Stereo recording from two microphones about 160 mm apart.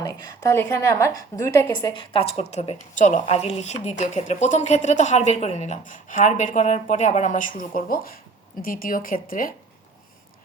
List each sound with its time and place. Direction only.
0.0 s a woman's voice: 20° left (ahead or behind); by 9.6 s 60° left (ahead or behind)